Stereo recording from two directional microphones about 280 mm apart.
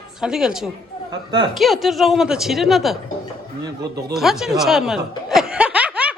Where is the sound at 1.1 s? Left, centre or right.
Centre.